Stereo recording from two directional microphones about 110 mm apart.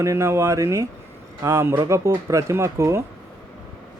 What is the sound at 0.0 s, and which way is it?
Speech, 25° right (ahead or behind).